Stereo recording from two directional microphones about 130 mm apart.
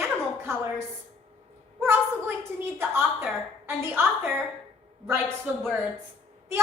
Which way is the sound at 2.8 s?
15° right (ahead or behind).